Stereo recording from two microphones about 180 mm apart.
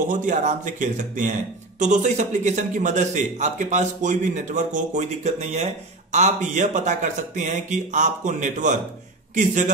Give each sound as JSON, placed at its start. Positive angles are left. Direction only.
{"t": 0.1, "sound": "a man's voice", "side_deg": -45}